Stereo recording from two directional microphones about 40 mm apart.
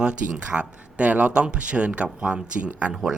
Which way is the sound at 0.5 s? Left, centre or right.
Right.